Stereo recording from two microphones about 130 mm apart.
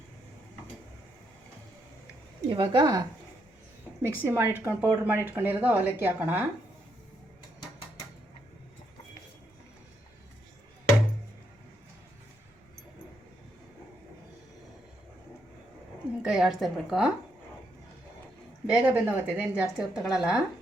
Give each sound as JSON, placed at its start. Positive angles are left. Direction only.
{"t": 2.5, "sound": "speech", "side_deg": -35}
{"t": 4.0, "sound": "a woman's voice", "side_deg": -15}
{"t": 16.2, "sound": "a woman's voice", "side_deg": -5}
{"t": 18.7, "sound": "a woman's voice", "side_deg": -10}